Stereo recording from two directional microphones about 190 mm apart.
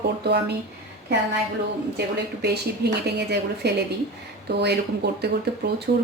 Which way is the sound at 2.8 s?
60° right (ahead or behind).